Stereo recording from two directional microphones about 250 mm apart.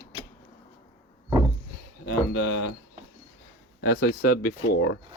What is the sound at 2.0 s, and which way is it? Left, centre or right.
Speech, left.